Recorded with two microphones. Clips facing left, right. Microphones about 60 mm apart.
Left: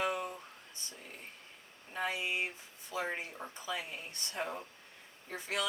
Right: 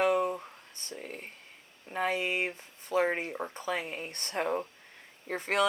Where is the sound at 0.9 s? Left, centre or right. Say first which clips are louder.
Right 10 dB; right.